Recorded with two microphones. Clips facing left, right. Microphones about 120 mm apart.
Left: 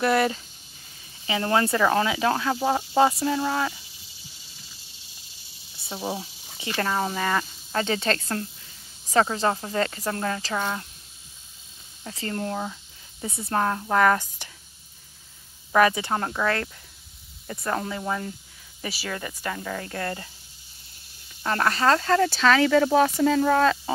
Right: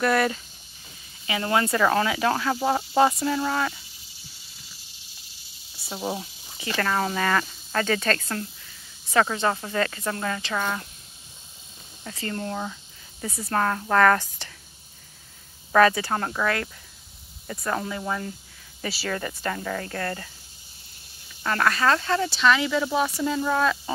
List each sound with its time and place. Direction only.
0.0 s speech: 25° left (ahead or behind)
2.5 s speech: 10° left (ahead or behind)
3.2 s speech: 30° left (ahead or behind)
5.9 s speech: centre (ahead or behind)
6.1 s speech: 25° left (ahead or behind)
7.0 s speech: 10° left (ahead or behind); by 10.8 s 30° left (ahead or behind)
12.0 s speech: 30° left (ahead or behind); by 14.5 s 15° left (ahead or behind)
15.7 s speech: 15° left (ahead or behind)
18.8 s speech: 15° left (ahead or behind)
19.8 s speech: 25° left (ahead or behind)
21.4 s speech: 30° left (ahead or behind); by 23.6 s 55° left (ahead or behind)